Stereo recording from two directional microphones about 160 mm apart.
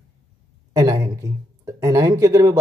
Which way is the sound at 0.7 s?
20° right (ahead or behind).